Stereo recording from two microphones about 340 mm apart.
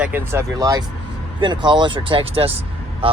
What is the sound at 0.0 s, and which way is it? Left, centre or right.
Speech, centre.